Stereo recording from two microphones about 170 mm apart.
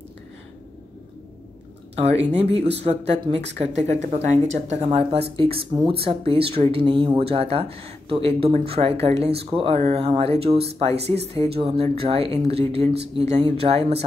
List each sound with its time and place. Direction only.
2.0 s speech: 35° right (ahead or behind)